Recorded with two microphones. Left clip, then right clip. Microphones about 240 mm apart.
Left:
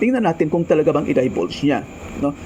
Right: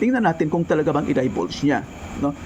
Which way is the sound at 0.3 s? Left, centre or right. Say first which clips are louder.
Left 3 dB; centre.